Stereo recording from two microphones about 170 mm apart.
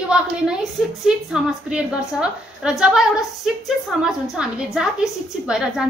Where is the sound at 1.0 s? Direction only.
5° right (ahead or behind).